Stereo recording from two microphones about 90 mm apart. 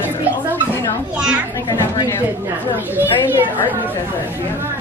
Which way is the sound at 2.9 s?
20° right (ahead or behind).